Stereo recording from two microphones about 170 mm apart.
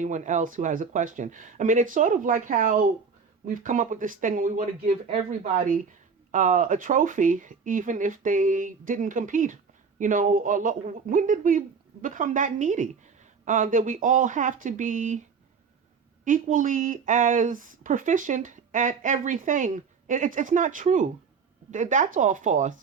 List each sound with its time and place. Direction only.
0.0 s speech: 45° right (ahead or behind)
16.2 s speech: 50° right (ahead or behind)